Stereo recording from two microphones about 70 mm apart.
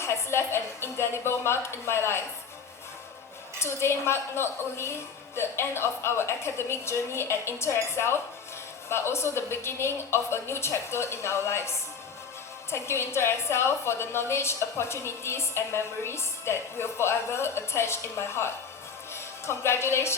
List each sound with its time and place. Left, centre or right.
0.0 s a woman's voice: left
3.6 s a woman's voice: left
12.7 s a woman's voice: left